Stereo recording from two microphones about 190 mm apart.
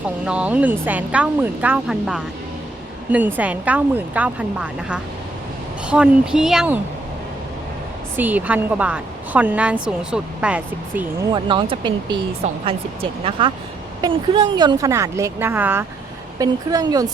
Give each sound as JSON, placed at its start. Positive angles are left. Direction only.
{"t": 0.3, "sound": "speech", "side_deg": -5}
{"t": 8.1, "sound": "speech", "side_deg": -10}
{"t": 11.2, "sound": "speech", "side_deg": -25}